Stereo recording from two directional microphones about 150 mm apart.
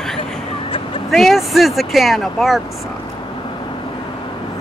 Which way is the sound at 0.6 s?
40° left (ahead or behind).